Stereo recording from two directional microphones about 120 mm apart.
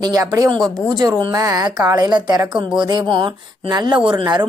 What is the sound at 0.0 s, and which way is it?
A woman's voice, 30° right (ahead or behind).